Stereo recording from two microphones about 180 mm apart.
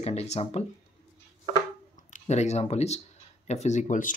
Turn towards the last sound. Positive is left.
turn(degrees=45)  # may be behind; listen again after turning